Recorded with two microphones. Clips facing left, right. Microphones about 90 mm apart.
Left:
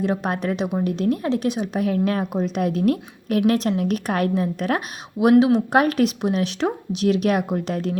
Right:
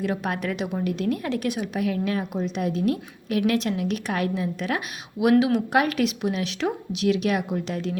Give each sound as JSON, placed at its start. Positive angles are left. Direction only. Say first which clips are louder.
{"t": 0.0, "sound": "a woman's voice", "louder": "left 4 dB", "side_deg": 30}
{"t": 5.4, "sound": "speech", "louder": "left 4 dB", "side_deg": 30}